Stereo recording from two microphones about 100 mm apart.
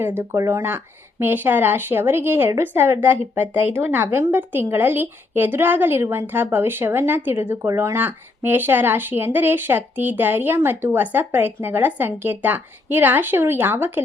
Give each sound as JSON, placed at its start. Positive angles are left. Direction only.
{"t": 0.0, "sound": "speech", "side_deg": -25}